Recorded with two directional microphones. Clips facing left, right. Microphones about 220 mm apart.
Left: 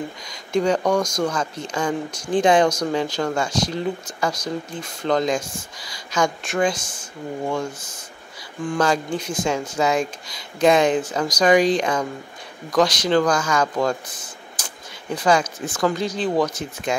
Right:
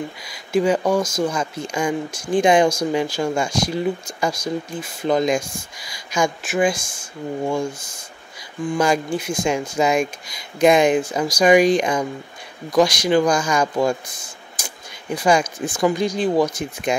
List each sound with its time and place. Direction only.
0.2 s speech: 5° right (ahead or behind)